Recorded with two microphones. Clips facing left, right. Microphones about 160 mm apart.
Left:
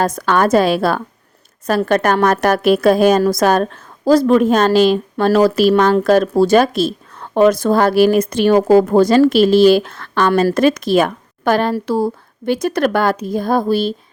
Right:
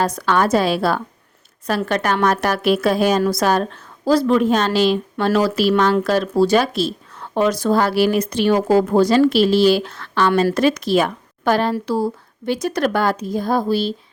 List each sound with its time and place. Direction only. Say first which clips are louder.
0.0 s a woman's voice: left 3 dB; 45° left (ahead or behind)